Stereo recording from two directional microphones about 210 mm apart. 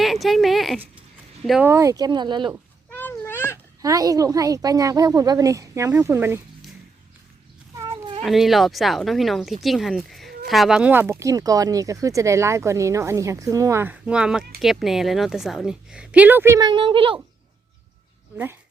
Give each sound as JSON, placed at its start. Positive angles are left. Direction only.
{"t": 0.0, "sound": "a sound", "side_deg": 0}
{"t": 1.5, "sound": "a woman's voice", "side_deg": 0}
{"t": 1.7, "sound": "speech", "side_deg": -15}
{"t": 2.9, "sound": "a sound", "side_deg": 10}
{"t": 3.8, "sound": "speech", "side_deg": -15}
{"t": 7.8, "sound": "cat", "side_deg": -20}
{"t": 8.2, "sound": "a woman's voice", "side_deg": 0}